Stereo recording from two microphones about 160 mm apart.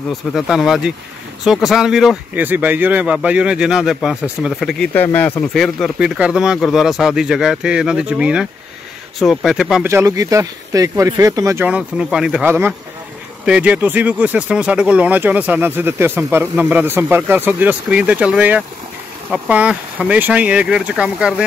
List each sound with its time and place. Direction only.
0.3 s speech: centre (ahead or behind)
4.9 s speech: 10° left (ahead or behind)
9.8 s speech: 20° right (ahead or behind)
11.6 s speech: 5° right (ahead or behind)